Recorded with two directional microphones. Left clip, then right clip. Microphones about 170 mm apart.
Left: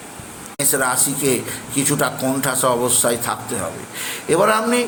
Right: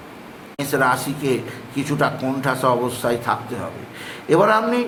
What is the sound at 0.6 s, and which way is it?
A man's voice, 15° left (ahead or behind).